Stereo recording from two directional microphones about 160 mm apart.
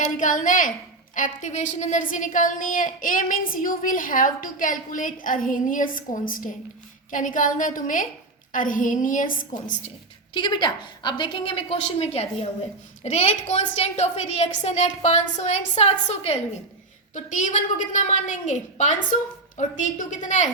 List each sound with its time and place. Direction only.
0.2 s a woman's voice: 55° left (ahead or behind)
10.3 s a woman's voice: 30° left (ahead or behind); by 20.5 s 50° left (ahead or behind)